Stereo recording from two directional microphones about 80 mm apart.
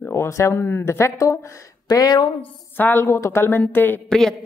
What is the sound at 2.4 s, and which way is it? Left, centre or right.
Speech, left.